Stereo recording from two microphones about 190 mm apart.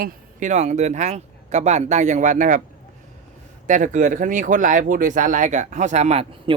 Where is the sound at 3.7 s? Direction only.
40° right (ahead or behind).